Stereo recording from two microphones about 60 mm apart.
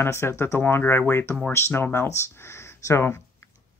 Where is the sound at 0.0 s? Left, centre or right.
Left.